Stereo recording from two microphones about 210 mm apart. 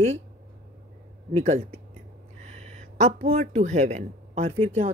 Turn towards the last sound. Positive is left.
turn(degrees=-30)  # may be behind; listen again after turning